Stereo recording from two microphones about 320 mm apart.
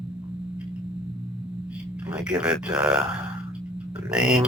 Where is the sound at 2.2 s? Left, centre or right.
Centre.